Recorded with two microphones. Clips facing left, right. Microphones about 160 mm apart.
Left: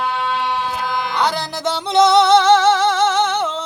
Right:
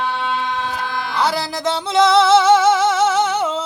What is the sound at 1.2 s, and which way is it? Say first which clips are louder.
Music: right 2 dB; centre (ahead or behind).